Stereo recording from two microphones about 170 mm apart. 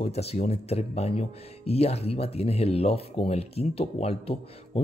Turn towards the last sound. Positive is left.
turn(degrees=35)  # may be behind; listen again after turning